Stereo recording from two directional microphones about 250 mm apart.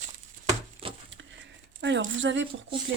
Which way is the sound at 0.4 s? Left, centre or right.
Right.